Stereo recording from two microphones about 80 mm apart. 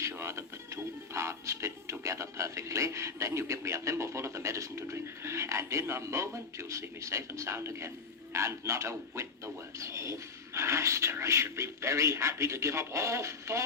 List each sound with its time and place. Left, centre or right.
0.0 s music: right
9.7 s speech: right